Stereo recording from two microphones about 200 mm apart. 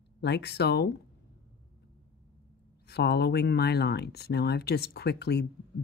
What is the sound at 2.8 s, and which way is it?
Speech, 55° left (ahead or behind).